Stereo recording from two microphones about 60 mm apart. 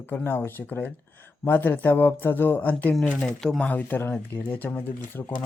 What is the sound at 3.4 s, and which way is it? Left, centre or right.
Speech, centre.